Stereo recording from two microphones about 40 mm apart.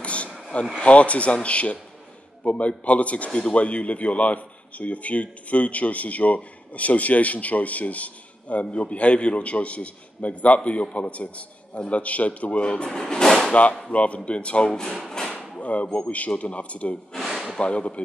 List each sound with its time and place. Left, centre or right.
0.0 s vehicle: left
0.7 s speech: left
13.0 s a sound: centre
13.5 s speech: left
14.7 s speech: centre
15.0 s a sound: centre
15.6 s speech: left